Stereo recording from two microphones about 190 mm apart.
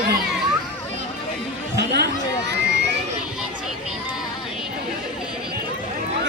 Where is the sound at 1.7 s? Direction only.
60° right (ahead or behind).